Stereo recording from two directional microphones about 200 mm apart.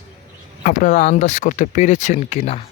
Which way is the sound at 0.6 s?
40° left (ahead or behind).